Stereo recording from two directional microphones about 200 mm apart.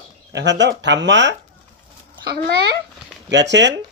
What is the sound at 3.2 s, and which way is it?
Speech, 65° right (ahead or behind).